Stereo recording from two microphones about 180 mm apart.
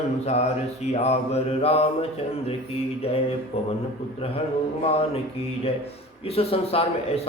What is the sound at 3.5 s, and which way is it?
Speech, 35° left (ahead or behind).